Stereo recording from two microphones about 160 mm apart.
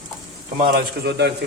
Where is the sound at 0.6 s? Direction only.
85° right.